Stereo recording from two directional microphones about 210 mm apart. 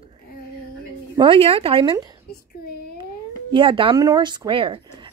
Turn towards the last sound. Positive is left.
turn(degrees=-25)  # may be behind; listen again after turning